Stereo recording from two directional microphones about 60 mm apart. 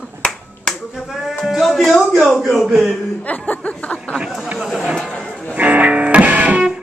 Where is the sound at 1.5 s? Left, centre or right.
Centre.